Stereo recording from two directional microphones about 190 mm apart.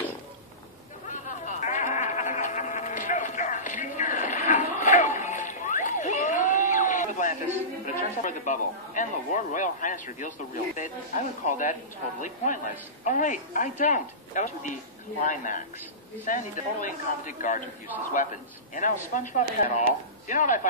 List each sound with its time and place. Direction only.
1.0 s a sound: 40° left (ahead or behind)
7.8 s speech: 40° left (ahead or behind)
13.0 s a man's voice: 40° left (ahead or behind)